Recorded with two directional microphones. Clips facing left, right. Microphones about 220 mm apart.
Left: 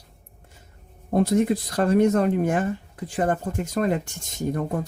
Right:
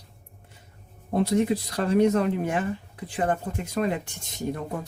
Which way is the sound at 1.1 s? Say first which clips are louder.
Left 3 dB; 50° left (ahead or behind).